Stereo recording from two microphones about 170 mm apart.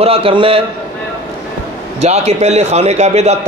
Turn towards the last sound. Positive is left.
turn(degrees=-40)  # may be behind; listen again after turning